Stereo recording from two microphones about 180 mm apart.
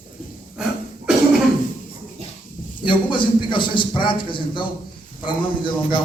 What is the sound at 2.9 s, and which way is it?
A man's voice, 25° left (ahead or behind).